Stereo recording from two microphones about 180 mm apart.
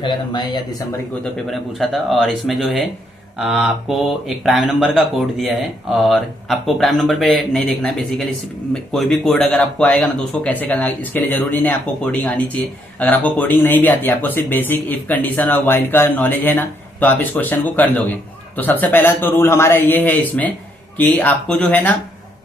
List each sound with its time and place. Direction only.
0.0 s speech: 25° left (ahead or behind)
1.2 s speech: centre (ahead or behind)